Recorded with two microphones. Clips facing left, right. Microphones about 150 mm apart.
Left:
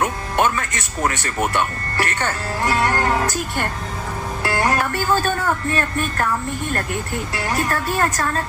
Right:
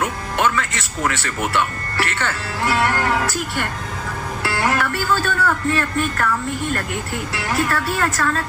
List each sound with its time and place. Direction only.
0.0 s music: 50° left (ahead or behind)
0.8 s speech: 45° left (ahead or behind)
4.4 s music: 45° left (ahead or behind)
5.7 s speech: 45° left (ahead or behind)
7.3 s speech: 45° left (ahead or behind)